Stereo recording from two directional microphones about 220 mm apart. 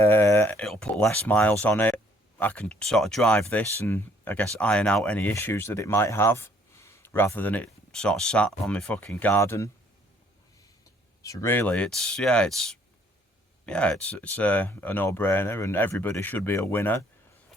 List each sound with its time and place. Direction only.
0.0 s speech: 10° left (ahead or behind)
11.2 s speech: 15° left (ahead or behind)